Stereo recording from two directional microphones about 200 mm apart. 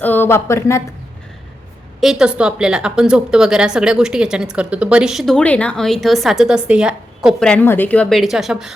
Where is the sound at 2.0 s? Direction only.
5° right (ahead or behind).